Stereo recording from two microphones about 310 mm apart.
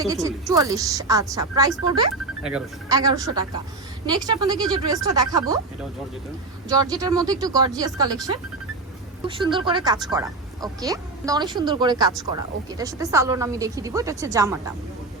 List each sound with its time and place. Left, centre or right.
0.0 s a woman's voice: centre
4.3 s a woman's voice: centre
6.7 s a woman's voice: centre